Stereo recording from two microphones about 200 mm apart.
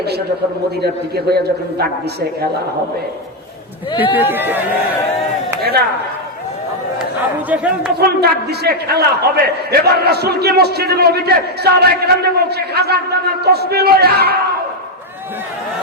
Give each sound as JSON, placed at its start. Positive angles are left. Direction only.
{"t": 0.8, "sound": "a man's voice", "side_deg": -55}
{"t": 4.1, "sound": "speech", "side_deg": -10}
{"t": 7.5, "sound": "speech", "side_deg": -5}
{"t": 7.9, "sound": "a man's voice", "side_deg": -55}